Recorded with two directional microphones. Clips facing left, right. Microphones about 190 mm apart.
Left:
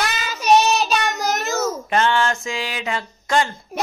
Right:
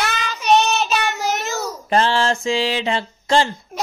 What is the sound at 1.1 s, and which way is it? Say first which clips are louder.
Child singing: left 1 dB; 40° left (ahead or behind).